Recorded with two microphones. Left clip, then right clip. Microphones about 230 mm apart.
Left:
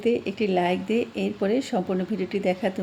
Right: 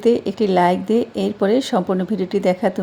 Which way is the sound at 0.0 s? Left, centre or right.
Right.